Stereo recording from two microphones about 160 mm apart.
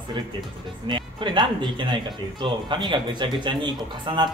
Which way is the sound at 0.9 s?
30° right (ahead or behind).